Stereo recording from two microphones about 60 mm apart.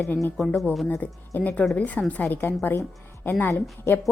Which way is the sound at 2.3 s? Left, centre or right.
Left.